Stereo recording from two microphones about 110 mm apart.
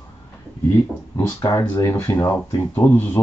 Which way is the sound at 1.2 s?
20° left (ahead or behind).